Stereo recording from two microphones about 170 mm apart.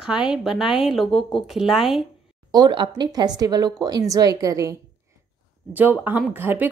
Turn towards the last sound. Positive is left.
turn(degrees=-10)  # may be behind; listen again after turning